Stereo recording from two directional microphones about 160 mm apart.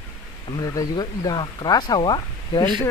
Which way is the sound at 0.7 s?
25° left (ahead or behind).